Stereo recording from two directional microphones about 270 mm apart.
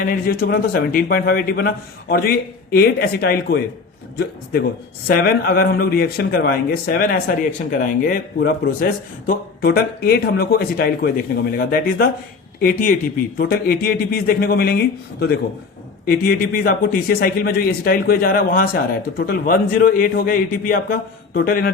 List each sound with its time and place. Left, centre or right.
0.0 s a man's voice: left
5.0 s a man's voice: left